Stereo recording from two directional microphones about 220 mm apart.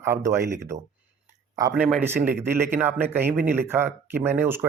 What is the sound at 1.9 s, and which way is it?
Speech, 5° right (ahead or behind).